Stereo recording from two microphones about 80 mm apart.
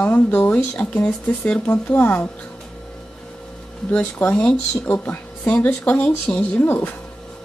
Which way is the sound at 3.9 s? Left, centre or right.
Centre.